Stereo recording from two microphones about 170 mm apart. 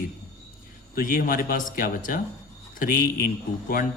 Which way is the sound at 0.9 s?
55° left (ahead or behind).